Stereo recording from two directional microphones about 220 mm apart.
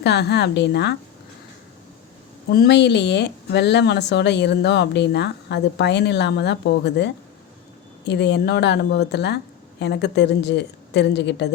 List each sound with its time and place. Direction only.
0.0 s speech: 50° left (ahead or behind)
2.5 s speech: 50° left (ahead or behind)